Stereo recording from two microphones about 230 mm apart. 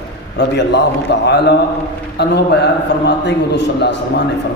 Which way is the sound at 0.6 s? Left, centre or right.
Left.